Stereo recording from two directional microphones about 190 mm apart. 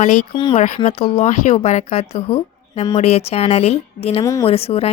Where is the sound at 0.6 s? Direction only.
35° left (ahead or behind).